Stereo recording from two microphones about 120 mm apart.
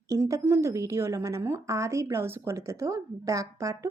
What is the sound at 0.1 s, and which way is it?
Speech, 25° right (ahead or behind).